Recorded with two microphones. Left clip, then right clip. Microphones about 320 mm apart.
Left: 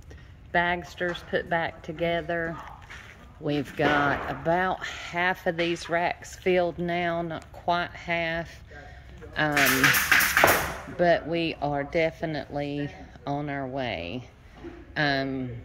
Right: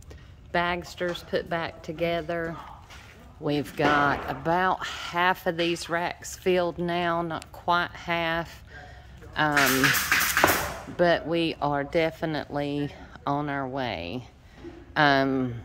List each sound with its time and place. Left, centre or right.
0.5 s speech: centre
9.8 s a sound: left
11.0 s speech: centre